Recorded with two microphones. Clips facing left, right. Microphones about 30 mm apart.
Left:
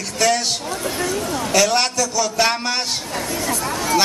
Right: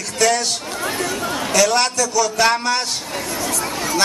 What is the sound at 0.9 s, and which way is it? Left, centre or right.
Speech, centre.